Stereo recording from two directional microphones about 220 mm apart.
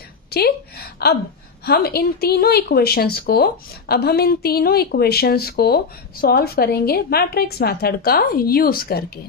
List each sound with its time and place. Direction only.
0.3 s speech: 45° left (ahead or behind)